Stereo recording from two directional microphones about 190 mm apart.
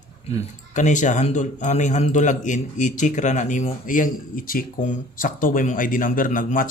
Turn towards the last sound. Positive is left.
turn(degrees=45)  # may be behind; listen again after turning